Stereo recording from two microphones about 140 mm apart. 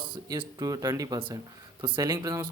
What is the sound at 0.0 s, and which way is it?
Speech, 35° right (ahead or behind).